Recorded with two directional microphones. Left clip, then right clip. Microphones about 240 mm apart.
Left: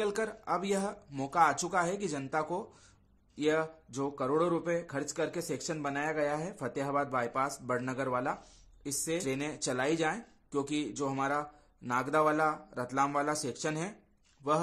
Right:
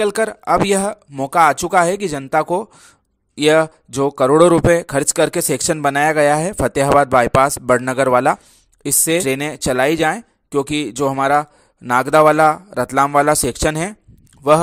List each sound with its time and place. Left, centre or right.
0.0 s speech: right